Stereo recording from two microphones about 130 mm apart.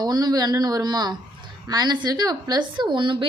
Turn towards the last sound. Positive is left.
turn(degrees=-40)  # may be behind; listen again after turning